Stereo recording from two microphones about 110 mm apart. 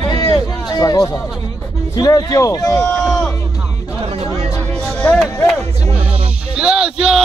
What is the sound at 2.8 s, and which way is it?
Speech, 5° left (ahead or behind).